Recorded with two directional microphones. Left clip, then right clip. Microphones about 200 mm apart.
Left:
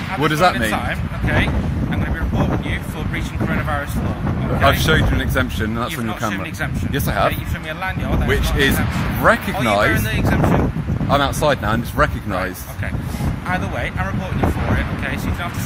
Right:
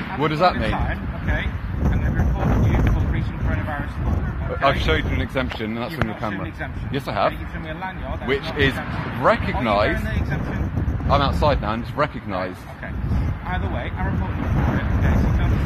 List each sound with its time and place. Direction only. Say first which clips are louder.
0.2 s speech: left 3 dB; 35° left (ahead or behind)
4.6 s speech: left 4 dB; 35° left (ahead or behind)
11.1 s speech: left 3 dB; 35° left (ahead or behind)